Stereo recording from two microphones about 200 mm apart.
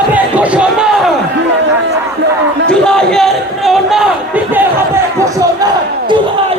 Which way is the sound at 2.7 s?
5° left (ahead or behind).